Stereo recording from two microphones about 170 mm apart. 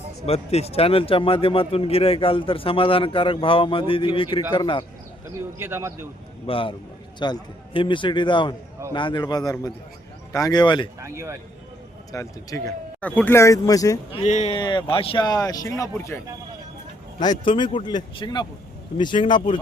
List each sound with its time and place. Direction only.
0.3 s a man's voice: 35° left (ahead or behind)
5.3 s speech: 15° right (ahead or behind)
6.5 s a man's voice: 30° left (ahead or behind)
11.0 s speech: 15° right (ahead or behind)
12.1 s speech: 20° left (ahead or behind)
13.0 s speech: 10° left (ahead or behind)
14.1 s a man's voice: 40° left (ahead or behind)
14.5 s speech: 25° left (ahead or behind)
17.2 s speech: 25° left (ahead or behind)